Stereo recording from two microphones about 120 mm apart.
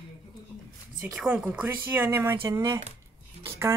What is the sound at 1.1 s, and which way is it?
Speech, 5° right (ahead or behind).